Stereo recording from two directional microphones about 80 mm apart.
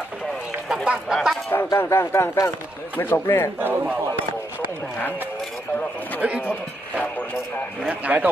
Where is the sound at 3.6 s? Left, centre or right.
Right.